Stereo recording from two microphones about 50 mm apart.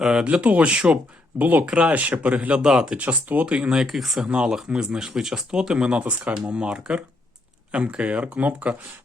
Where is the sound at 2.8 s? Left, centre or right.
Right.